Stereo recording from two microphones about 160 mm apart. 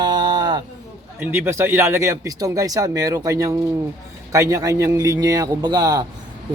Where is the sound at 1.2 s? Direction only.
15° right (ahead or behind).